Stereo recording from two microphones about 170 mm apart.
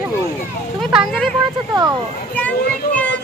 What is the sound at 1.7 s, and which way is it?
Speech, 25° right (ahead or behind).